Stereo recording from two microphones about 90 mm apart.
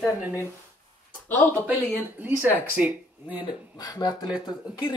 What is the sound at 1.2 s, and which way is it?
Speech, 20° left (ahead or behind).